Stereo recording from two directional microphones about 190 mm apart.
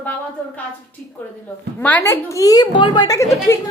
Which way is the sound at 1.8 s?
10° left (ahead or behind).